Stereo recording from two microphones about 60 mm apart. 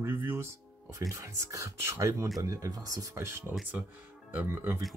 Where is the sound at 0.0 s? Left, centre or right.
Right.